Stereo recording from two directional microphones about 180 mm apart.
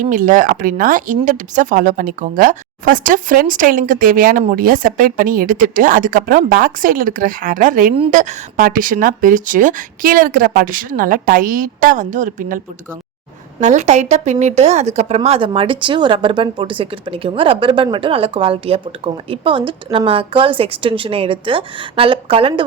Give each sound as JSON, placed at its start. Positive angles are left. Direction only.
{"t": 0.0, "sound": "speech", "side_deg": -45}